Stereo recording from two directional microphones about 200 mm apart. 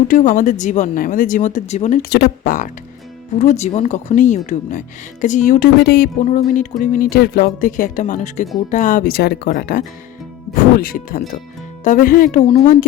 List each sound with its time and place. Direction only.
0.1 s speech: 40° left (ahead or behind)